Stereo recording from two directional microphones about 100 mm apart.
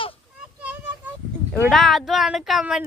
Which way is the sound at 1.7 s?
Centre (ahead or behind).